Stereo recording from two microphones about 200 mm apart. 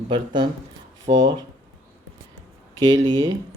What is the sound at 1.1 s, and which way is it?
Speech, 55° right (ahead or behind).